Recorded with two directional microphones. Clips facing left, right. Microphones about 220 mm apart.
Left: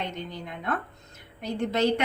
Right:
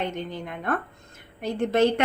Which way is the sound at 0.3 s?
55° right (ahead or behind).